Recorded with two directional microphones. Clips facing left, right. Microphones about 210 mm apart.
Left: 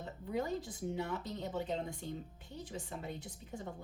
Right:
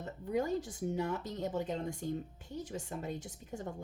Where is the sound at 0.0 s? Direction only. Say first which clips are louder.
Right 4 dB; 45° right (ahead or behind).